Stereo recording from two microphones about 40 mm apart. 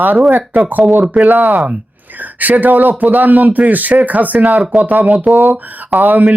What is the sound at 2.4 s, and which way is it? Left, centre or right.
A man's voice, right.